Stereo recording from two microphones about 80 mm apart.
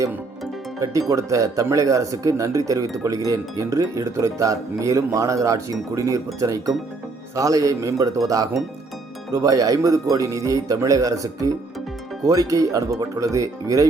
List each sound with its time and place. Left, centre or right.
0.8 s speech: right